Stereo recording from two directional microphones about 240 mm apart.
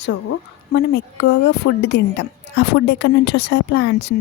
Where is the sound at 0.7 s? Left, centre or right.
Left.